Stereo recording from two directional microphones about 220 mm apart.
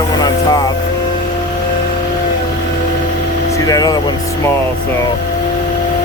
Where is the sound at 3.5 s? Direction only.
15° left (ahead or behind).